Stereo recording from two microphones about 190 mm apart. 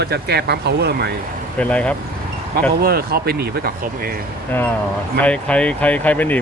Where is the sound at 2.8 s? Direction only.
55° right (ahead or behind).